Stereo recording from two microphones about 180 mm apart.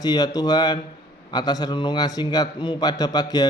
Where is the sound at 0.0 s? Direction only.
20° left (ahead or behind).